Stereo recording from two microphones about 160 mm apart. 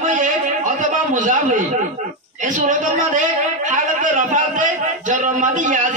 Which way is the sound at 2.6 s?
55° right (ahead or behind).